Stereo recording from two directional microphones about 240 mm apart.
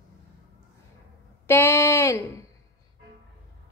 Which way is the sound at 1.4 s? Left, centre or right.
Centre.